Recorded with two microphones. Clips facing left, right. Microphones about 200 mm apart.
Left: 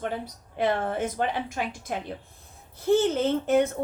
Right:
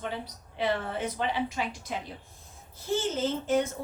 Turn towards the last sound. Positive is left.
turn(degrees=60)  # may be behind; listen again after turning